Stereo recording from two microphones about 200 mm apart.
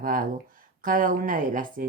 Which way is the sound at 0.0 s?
45° right (ahead or behind).